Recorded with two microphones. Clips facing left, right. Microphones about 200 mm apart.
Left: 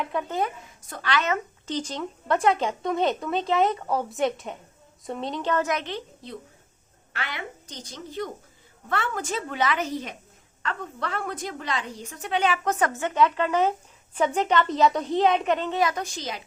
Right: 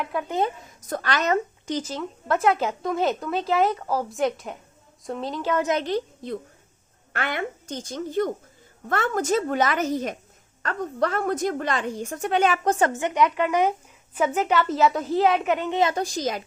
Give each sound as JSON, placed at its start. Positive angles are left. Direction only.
{"t": 0.0, "sound": "speech", "side_deg": -5}
{"t": 0.3, "sound": "speech", "side_deg": -20}
{"t": 0.8, "sound": "a woman's voice", "side_deg": -40}
{"t": 1.6, "sound": "speech", "side_deg": -10}
{"t": 5.6, "sound": "a woman's voice", "side_deg": -35}
{"t": 12.9, "sound": "speech", "side_deg": -15}
{"t": 15.8, "sound": "a woman's voice", "side_deg": -30}